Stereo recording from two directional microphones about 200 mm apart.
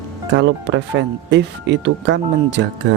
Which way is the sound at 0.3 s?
65° right (ahead or behind).